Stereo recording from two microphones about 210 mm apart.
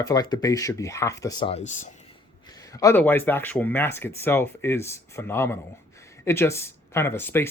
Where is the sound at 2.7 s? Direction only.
15° left (ahead or behind).